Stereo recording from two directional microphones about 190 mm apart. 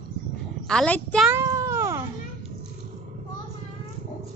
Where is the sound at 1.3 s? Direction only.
15° right (ahead or behind).